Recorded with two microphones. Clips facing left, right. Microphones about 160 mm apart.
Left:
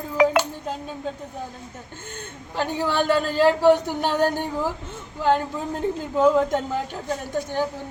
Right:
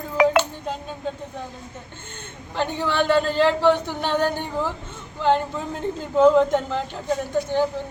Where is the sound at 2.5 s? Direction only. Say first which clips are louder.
Even; 5° left (ahead or behind).